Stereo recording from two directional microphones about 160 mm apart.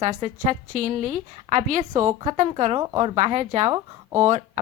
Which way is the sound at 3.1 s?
45° right (ahead or behind).